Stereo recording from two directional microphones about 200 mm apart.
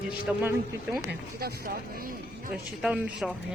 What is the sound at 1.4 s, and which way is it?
Speech, 50° right (ahead or behind).